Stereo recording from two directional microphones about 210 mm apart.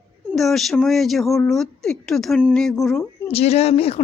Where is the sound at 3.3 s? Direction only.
30° left (ahead or behind).